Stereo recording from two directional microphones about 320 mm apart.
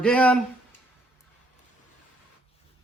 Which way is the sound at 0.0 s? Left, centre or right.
Centre.